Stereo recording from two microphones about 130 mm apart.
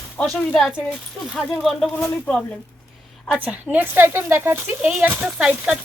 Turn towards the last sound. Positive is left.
turn(degrees=-5)  # may be behind; listen again after turning